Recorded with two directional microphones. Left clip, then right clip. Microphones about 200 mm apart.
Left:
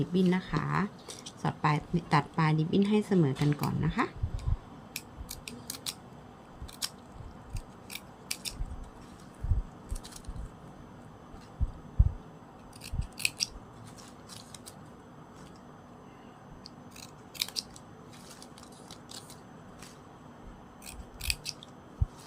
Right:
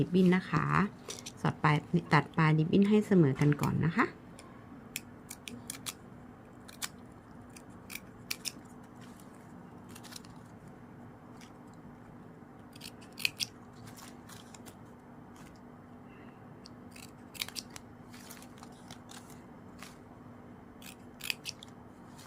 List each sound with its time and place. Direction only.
0.0 s a woman's voice: 15° right (ahead or behind)
4.9 s scissors: 20° right (ahead or behind)
7.9 s scissors: 20° right (ahead or behind)
12.8 s scissors: 25° right (ahead or behind)
17.3 s scissors: 20° right (ahead or behind)